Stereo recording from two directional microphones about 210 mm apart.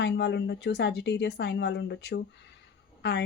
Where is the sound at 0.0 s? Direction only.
55° left (ahead or behind).